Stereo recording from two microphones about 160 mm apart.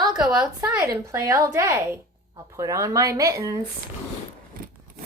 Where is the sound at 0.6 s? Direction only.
20° right (ahead or behind).